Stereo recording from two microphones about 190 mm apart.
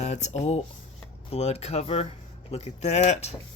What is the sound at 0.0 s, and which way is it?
Speech, 35° left (ahead or behind).